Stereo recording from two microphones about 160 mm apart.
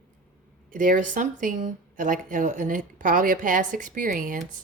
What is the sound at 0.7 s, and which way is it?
A woman's voice, 60° right (ahead or behind).